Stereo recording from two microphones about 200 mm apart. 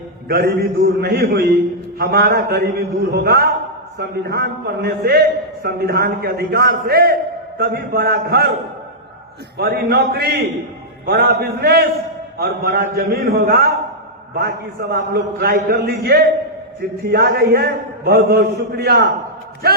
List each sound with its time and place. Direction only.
0.3 s a man's voice: 50° right (ahead or behind)
9.6 s a man's voice: 50° right (ahead or behind)